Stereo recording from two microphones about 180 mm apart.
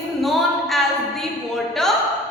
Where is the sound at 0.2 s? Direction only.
Centre (ahead or behind).